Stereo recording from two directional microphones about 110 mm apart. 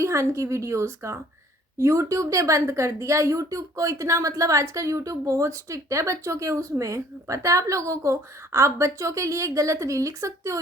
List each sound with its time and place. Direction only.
0.0 s a woman's voice: 25° right (ahead or behind)